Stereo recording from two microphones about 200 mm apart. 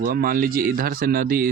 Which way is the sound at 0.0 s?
50° right (ahead or behind).